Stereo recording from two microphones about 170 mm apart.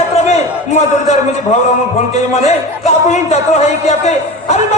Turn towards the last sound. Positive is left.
turn(degrees=40)  # may be behind; listen again after turning